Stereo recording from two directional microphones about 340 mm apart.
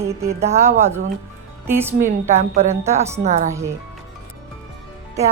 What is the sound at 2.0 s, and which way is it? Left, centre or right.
Speech, centre.